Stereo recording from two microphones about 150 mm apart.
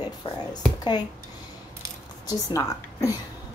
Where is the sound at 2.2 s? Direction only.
20° left (ahead or behind).